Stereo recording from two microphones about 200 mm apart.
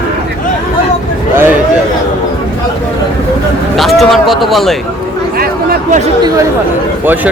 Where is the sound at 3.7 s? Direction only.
Centre (ahead or behind).